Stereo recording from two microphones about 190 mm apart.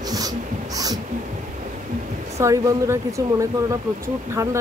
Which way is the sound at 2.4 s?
15° right (ahead or behind).